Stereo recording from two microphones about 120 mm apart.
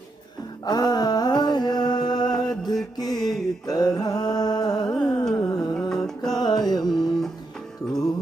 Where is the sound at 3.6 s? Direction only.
35° left (ahead or behind).